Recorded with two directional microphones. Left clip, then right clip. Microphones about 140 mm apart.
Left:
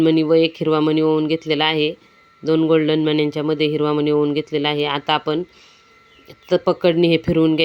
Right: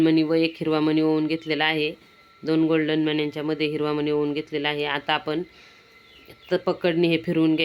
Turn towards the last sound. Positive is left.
turn(degrees=30)  # may be behind; listen again after turning